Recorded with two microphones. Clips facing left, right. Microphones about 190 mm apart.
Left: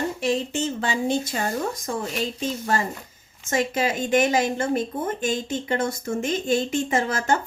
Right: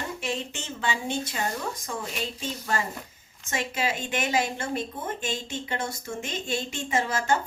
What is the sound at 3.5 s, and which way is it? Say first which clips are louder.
A woman's voice: left 6 dB; 45° left (ahead or behind).